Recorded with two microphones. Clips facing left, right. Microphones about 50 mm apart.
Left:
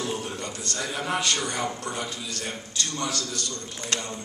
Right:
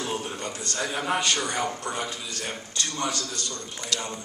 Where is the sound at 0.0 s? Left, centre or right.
Right.